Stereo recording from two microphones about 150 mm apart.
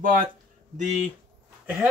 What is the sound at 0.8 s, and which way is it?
Speech, 50° right (ahead or behind).